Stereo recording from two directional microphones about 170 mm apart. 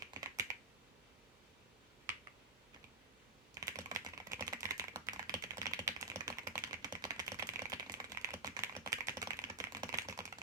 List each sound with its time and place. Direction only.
0.1 s computer keyboard: 20° right (ahead or behind)
3.5 s typing: 20° right (ahead or behind)